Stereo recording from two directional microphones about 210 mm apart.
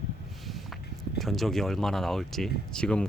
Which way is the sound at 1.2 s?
Centre (ahead or behind).